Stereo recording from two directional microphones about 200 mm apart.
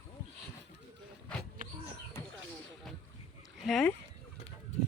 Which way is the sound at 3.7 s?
5° left (ahead or behind).